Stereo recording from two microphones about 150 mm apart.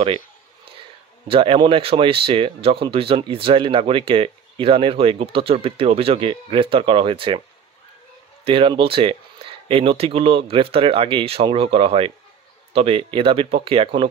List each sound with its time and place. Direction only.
0.7 s speech: 35° right (ahead or behind)
8.5 s speech: 35° right (ahead or behind)